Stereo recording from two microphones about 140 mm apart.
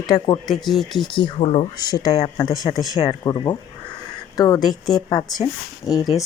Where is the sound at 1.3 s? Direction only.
45° left (ahead or behind).